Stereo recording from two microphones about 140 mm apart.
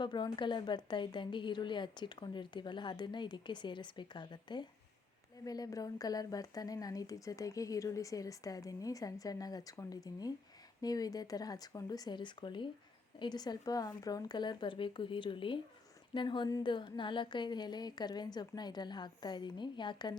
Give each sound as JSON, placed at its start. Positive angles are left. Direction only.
{"t": 0.0, "sound": "a woman's voice", "side_deg": 35}